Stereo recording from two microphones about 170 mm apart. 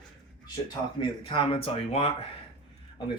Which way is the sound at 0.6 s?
30° left (ahead or behind).